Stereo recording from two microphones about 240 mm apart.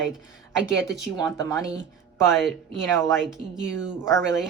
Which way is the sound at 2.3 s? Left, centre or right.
Centre.